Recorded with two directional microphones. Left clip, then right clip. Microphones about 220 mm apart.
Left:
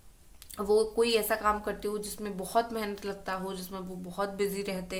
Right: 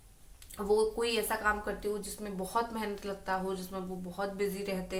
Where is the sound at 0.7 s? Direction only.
45° left (ahead or behind).